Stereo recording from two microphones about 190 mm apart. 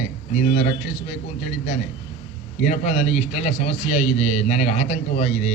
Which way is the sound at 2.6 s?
35° left (ahead or behind).